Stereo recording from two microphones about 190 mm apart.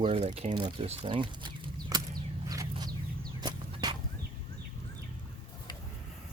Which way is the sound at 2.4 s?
20° right (ahead or behind).